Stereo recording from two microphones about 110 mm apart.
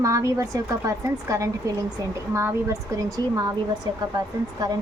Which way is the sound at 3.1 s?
35° right (ahead or behind).